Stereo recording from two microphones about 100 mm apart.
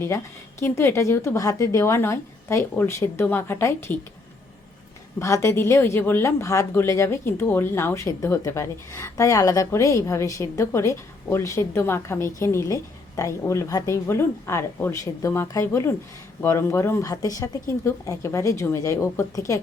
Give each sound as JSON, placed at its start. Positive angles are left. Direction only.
{"t": 0.6, "sound": "a woman's voice", "side_deg": 25}
{"t": 5.2, "sound": "a woman's voice", "side_deg": 30}